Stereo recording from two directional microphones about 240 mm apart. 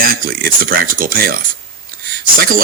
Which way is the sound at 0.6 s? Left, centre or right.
Right.